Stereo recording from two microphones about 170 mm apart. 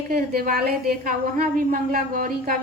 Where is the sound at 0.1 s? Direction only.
60° right (ahead or behind).